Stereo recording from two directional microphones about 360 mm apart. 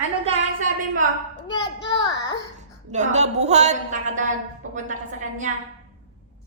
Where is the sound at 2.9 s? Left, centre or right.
Centre.